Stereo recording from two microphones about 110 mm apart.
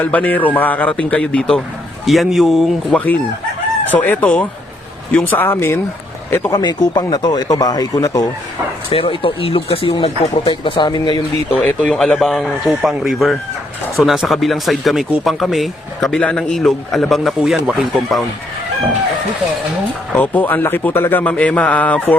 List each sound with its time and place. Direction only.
0.0 s a man's voice: 15° left (ahead or behind); by 3.0 s centre (ahead or behind)
3.9 s a man's voice: 15° left (ahead or behind)
6.5 s speech: 40° left (ahead or behind)
8.9 s speech: 55° left (ahead or behind)
10.5 s speech: 45° left (ahead or behind)
11.6 s a man's voice: 10° left (ahead or behind)
20.1 s a man's voice: 15° left (ahead or behind)